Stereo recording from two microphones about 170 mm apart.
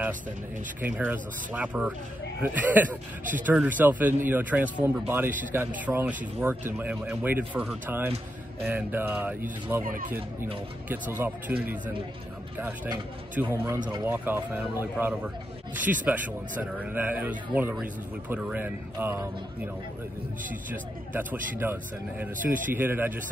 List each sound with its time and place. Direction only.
0.7 s speech: 10° right (ahead or behind)
9.8 s speech: 55° right (ahead or behind)
10.9 s speech: 10° right (ahead or behind)
12.5 s speech: 10° right (ahead or behind)
21.1 s speech: 10° right (ahead or behind)